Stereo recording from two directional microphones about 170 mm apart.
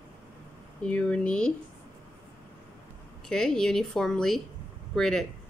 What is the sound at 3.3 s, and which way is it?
Speech, 5° left (ahead or behind).